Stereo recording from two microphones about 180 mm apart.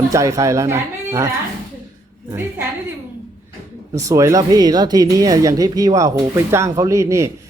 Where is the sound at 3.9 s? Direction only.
15° right (ahead or behind).